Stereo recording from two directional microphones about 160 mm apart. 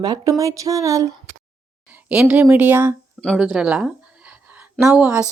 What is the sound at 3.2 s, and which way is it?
A woman's voice, centre (ahead or behind).